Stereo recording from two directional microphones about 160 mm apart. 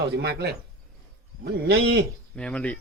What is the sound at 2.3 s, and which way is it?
Speech, 5° left (ahead or behind).